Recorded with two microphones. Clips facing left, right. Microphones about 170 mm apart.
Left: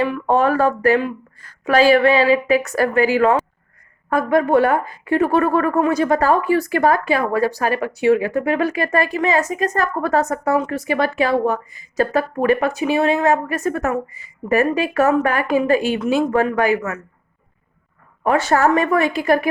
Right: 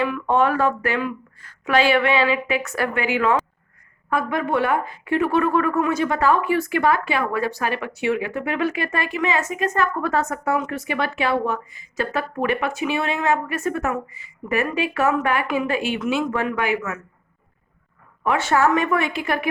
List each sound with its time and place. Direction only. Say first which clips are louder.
0.0 s a woman's voice: left 3 dB; 35° left (ahead or behind)
18.2 s a woman's voice: left 3 dB; 40° left (ahead or behind)